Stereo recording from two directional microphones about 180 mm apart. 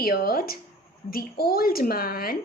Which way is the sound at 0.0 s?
55° left (ahead or behind).